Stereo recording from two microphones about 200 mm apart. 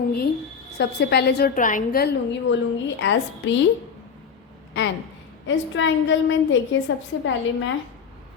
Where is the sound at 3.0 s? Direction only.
65° left (ahead or behind).